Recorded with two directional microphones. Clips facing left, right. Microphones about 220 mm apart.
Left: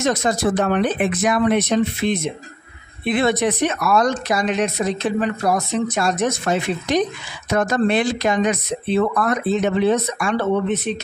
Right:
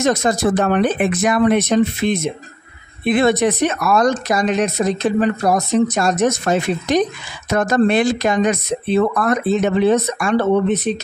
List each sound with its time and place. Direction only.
0.0 s speech: 45° right (ahead or behind)